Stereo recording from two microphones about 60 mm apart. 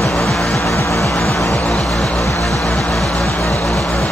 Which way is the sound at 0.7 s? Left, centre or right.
Left.